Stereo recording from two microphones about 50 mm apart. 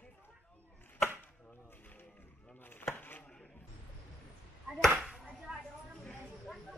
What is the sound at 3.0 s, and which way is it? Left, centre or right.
Chopping, left.